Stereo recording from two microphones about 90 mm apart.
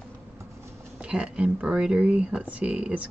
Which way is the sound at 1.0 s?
10° right (ahead or behind).